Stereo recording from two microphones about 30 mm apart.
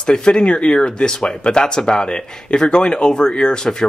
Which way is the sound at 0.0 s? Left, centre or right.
Left.